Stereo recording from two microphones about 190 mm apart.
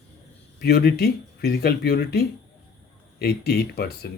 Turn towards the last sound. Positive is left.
turn(degrees=55)  # may be behind; listen again after turning